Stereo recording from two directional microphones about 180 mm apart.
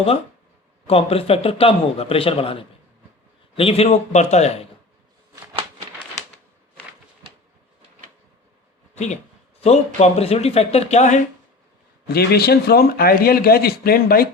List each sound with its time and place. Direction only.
0.9 s a man's voice: 30° left (ahead or behind)
9.6 s a man's voice: 35° left (ahead or behind)
12.0 s speech: 60° left (ahead or behind)